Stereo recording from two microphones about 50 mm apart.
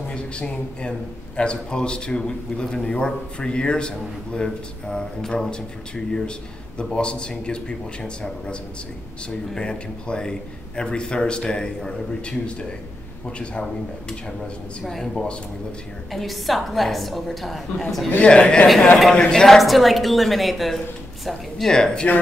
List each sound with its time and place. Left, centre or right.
0.1 s a man's voice: left
14.9 s a man's voice: centre
18.2 s a man's voice: centre
19.4 s a woman's voice: centre